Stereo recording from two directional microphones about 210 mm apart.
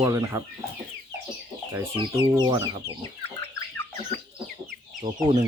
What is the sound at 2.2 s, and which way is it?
Speech, 20° right (ahead or behind).